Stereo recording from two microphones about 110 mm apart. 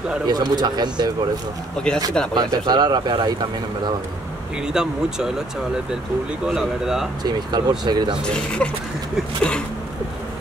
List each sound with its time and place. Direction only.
0.3 s speech: 40° right (ahead or behind)
1.8 s speech: 5° left (ahead or behind)
2.3 s speech: 40° right (ahead or behind)
4.7 s speech: 5° right (ahead or behind)
6.4 s speech: 5° right (ahead or behind)
7.2 s speech: 40° right (ahead or behind)
8.3 s speech: 10° left (ahead or behind)